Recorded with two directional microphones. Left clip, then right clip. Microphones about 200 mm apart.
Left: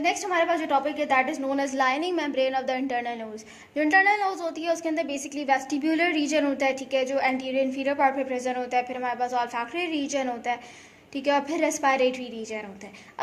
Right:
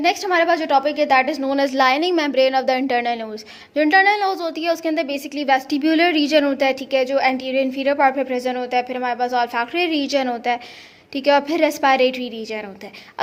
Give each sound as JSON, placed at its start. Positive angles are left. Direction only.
{"t": 0.0, "sound": "a woman's voice", "side_deg": -40}